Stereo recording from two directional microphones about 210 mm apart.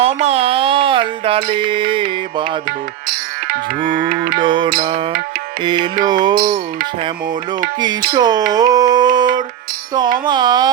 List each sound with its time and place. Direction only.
0.0 s a sound: 30° right (ahead or behind)
1.5 s mantra: 25° right (ahead or behind)
2.6 s music: 45° right (ahead or behind)
4.4 s mantra: 20° right (ahead or behind)
7.8 s mantra: 20° right (ahead or behind)